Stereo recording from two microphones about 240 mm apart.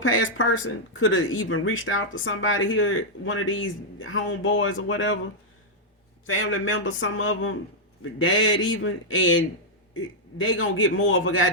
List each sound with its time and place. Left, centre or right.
0.0 s speech: left
6.2 s speech: left
10.4 s speech: left